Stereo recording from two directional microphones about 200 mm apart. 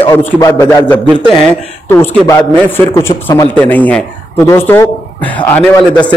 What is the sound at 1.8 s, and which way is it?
A man's voice, 15° left (ahead or behind).